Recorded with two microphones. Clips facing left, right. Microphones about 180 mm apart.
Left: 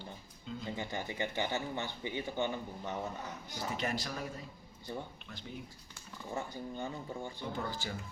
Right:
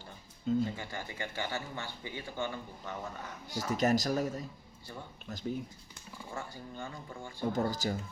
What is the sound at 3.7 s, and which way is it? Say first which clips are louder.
Speech: right 10 dB; 40° right (ahead or behind).